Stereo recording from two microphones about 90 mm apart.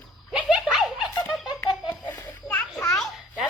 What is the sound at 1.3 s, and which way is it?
Baby laughter, centre (ahead or behind).